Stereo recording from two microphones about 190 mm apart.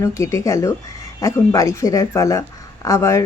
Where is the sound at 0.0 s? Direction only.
15° left (ahead or behind).